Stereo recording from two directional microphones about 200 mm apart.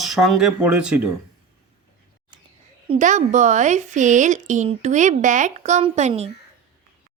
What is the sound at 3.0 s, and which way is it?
A woman's voice, 40° right (ahead or behind).